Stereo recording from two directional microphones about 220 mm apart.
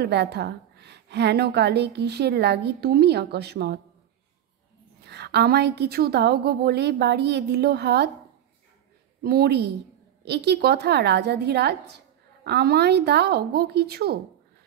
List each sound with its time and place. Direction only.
0.0 s a woman's voice: 50° right (ahead or behind)
5.0 s a woman's voice: 50° right (ahead or behind)
9.2 s a woman's voice: 45° right (ahead or behind)